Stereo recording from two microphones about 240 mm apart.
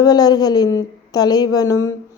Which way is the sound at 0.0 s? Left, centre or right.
Centre.